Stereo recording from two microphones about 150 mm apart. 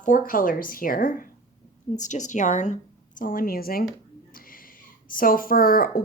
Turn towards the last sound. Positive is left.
turn(degrees=70)  # may be behind; listen again after turning